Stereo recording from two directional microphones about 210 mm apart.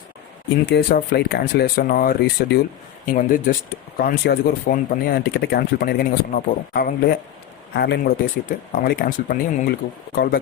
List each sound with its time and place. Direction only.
0.6 s speech: 50° left (ahead or behind)